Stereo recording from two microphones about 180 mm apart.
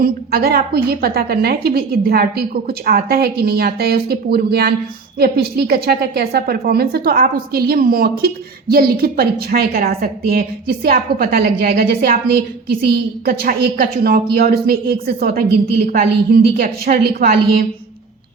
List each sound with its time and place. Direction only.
0.0 s a woman's voice: 60° right (ahead or behind)